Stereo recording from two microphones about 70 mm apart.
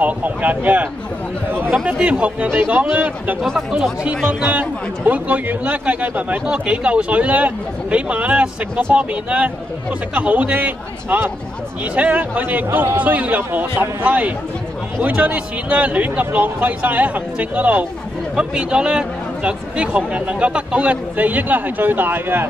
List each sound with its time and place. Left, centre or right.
0.0 s a man's voice: right
1.9 s a man's voice: centre